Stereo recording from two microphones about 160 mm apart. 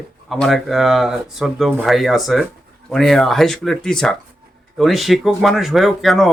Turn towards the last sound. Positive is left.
turn(degrees=0)  # may be behind; listen again after turning